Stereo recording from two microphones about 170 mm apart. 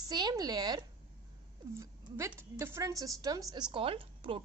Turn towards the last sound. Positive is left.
turn(degrees=-30)  # may be behind; listen again after turning